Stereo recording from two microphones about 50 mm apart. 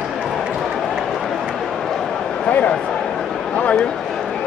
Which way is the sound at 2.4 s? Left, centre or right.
Left.